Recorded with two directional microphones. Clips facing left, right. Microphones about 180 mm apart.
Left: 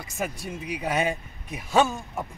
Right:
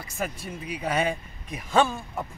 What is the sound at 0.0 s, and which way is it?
Speech, 15° left (ahead or behind).